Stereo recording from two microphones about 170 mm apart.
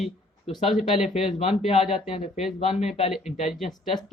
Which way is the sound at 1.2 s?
35° left (ahead or behind).